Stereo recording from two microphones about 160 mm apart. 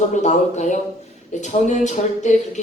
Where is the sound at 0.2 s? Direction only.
45° left (ahead or behind).